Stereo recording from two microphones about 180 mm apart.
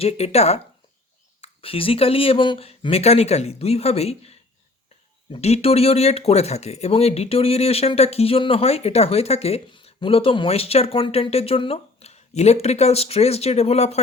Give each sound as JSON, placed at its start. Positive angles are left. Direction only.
{"t": 0.0, "sound": "speech", "side_deg": 35}